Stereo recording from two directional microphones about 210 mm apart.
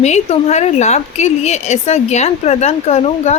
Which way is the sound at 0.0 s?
30° left (ahead or behind).